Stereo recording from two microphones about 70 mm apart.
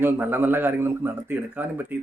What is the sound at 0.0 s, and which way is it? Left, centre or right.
Speech, right.